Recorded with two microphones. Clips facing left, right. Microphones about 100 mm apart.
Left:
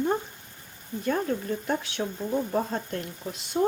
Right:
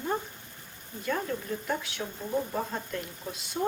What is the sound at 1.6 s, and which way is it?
Speech, 30° left (ahead or behind).